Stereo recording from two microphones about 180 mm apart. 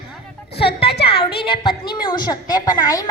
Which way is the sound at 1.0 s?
30° left (ahead or behind).